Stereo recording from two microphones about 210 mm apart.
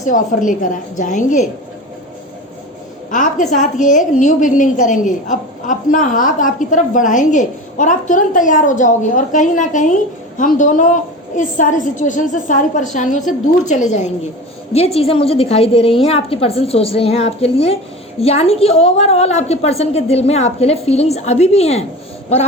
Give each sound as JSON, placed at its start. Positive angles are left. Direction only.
{"t": 0.0, "sound": "a woman's voice", "side_deg": 35}
{"t": 3.1, "sound": "a woman's voice", "side_deg": 35}